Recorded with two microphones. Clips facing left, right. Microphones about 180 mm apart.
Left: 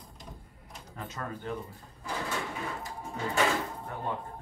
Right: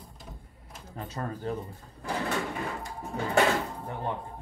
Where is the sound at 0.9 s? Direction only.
35° right (ahead or behind).